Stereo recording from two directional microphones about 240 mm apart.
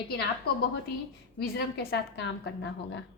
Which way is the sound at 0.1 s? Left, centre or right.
Left.